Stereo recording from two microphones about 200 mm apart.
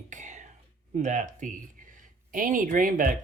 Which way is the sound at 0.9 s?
40° right (ahead or behind).